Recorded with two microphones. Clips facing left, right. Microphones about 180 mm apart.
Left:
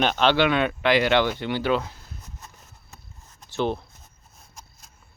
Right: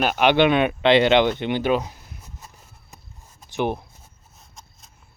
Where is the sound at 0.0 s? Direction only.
10° right (ahead or behind).